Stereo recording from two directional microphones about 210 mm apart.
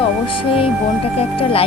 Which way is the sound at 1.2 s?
25° left (ahead or behind).